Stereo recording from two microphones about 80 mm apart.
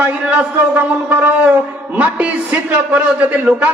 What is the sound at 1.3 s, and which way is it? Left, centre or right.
A man's voice, centre.